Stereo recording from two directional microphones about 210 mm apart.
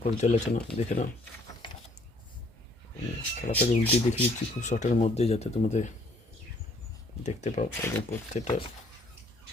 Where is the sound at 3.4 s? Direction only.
30° left (ahead or behind).